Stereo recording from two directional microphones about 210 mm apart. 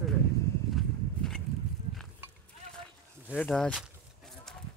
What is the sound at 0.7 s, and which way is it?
Horse, centre (ahead or behind).